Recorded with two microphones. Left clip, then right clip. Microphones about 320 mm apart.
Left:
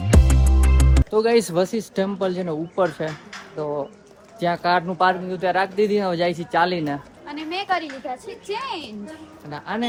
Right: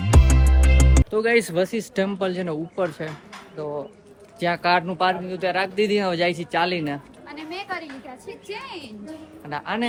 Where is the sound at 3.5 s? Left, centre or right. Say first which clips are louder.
Left 3 dB; centre.